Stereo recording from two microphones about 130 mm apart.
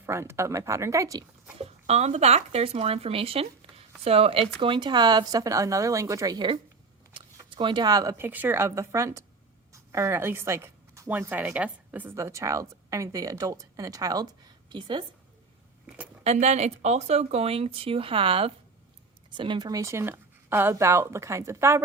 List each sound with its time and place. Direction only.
0.0 s a woman's voice: 20° right (ahead or behind)
1.5 s speech: 55° right (ahead or behind)
4.6 s a woman's voice: 40° right (ahead or behind)
7.1 s camera: 40° right (ahead or behind)
7.5 s speech: 40° right (ahead or behind)
8.2 s a woman's voice: 15° right (ahead or behind); by 15.0 s 40° right (ahead or behind)
16.2 s a woman's voice: 60° right (ahead or behind); by 21.8 s 20° right (ahead or behind)